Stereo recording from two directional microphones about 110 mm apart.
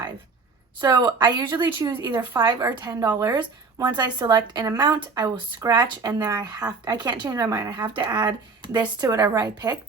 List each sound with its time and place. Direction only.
0.8 s speech: 40° right (ahead or behind)
7.7 s speech: 40° right (ahead or behind)